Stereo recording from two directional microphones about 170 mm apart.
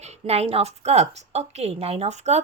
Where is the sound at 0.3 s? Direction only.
35° right (ahead or behind).